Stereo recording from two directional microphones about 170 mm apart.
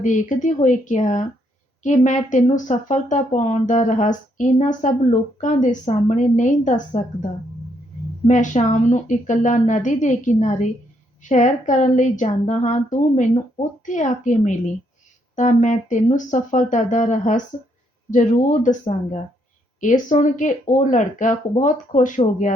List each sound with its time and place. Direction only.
0.0 s speech: 45° left (ahead or behind)
8.3 s speech: 45° left (ahead or behind)